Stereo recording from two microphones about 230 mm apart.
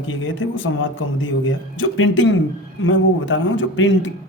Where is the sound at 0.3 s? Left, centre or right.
Left.